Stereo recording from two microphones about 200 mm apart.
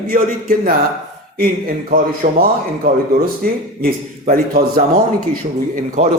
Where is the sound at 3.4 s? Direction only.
50° right (ahead or behind).